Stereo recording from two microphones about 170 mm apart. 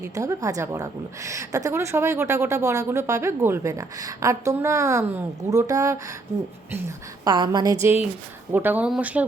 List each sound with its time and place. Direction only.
0.0 s a woman's voice: 20° right (ahead or behind)
7.3 s a woman's voice: 25° right (ahead or behind)
8.5 s a woman's voice: 10° right (ahead or behind)